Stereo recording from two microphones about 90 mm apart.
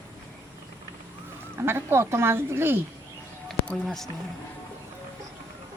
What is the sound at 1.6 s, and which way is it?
Speech, 25° right (ahead or behind).